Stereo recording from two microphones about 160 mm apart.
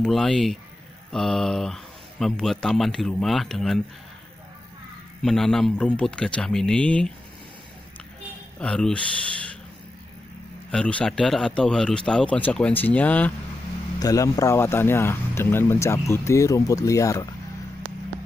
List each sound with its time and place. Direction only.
0.0 s speech: centre (ahead or behind)
5.2 s speech: centre (ahead or behind)
8.5 s speech: 5° left (ahead or behind)
10.7 s speech: 5° left (ahead or behind)
13.9 s speech: 20° left (ahead or behind)